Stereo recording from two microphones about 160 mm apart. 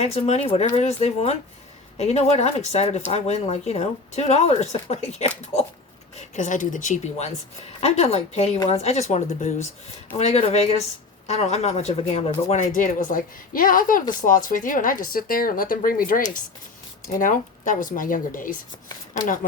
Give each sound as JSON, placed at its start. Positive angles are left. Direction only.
{"t": 0.0, "sound": "a woman's voice", "side_deg": 45}
{"t": 8.5, "sound": "speech", "side_deg": 25}
{"t": 8.8, "sound": "a woman's voice", "side_deg": 40}